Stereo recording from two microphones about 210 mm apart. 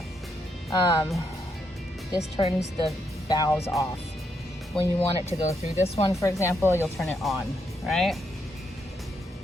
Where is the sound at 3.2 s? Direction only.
20° left (ahead or behind).